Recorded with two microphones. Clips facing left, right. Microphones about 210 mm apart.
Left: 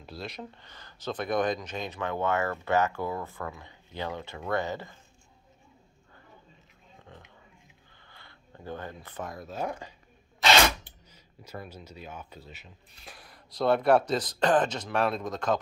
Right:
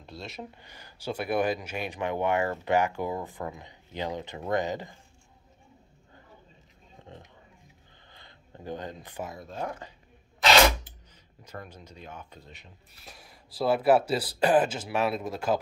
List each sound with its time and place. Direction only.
0.0 s speech: centre (ahead or behind)
0.4 s speech: 10° right (ahead or behind)
8.1 s a sound: 20° right (ahead or behind)
9.3 s speech: 5° left (ahead or behind)
11.4 s speech: 10° left (ahead or behind); by 15.6 s 10° right (ahead or behind)